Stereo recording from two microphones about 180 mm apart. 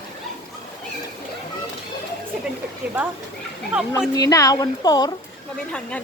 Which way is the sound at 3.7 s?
5° right (ahead or behind).